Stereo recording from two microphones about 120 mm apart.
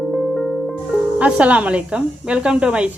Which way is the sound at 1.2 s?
10° right (ahead or behind).